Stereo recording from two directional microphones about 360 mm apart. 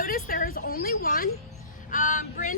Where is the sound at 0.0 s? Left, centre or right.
Left.